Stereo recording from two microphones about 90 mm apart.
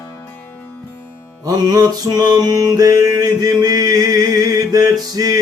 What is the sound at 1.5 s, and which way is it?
Music, 40° right (ahead or behind).